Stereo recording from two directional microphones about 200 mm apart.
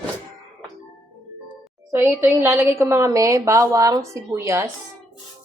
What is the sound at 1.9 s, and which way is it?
A woman's voice, 10° right (ahead or behind).